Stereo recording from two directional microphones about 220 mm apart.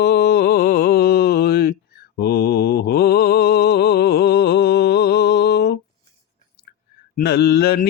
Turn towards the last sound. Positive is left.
turn(degrees=45)  # may be behind; listen again after turning